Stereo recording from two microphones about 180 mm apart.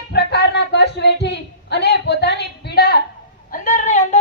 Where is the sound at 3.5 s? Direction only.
45° left (ahead or behind).